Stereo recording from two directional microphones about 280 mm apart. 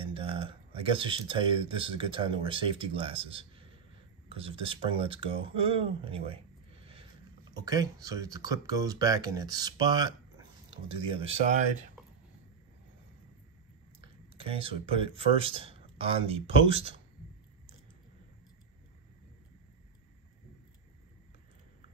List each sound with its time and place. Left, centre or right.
0.0 s speech: centre
7.5 s speech: centre
14.3 s speech: centre